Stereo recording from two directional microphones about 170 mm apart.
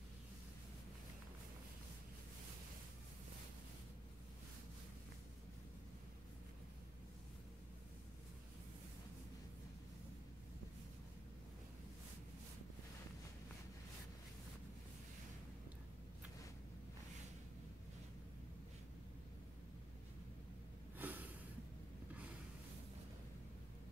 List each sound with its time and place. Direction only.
21.0 s snort: 10° right (ahead or behind)